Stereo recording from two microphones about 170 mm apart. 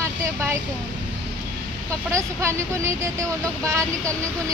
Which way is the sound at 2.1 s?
15° right (ahead or behind).